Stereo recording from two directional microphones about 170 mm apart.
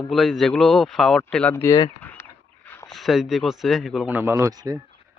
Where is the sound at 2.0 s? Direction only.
10° left (ahead or behind).